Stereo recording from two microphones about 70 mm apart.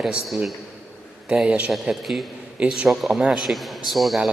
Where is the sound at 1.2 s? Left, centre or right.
Centre.